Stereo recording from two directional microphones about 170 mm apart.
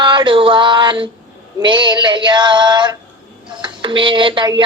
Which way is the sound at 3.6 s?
30° right (ahead or behind).